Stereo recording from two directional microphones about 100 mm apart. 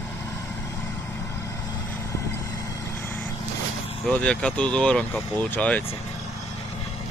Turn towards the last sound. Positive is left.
turn(degrees=15)  # may be behind; listen again after turning